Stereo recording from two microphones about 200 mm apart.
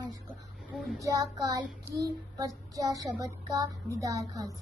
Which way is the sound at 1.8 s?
15° right (ahead or behind).